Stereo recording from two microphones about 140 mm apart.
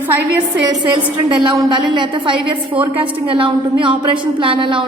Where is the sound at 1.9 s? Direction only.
35° right (ahead or behind).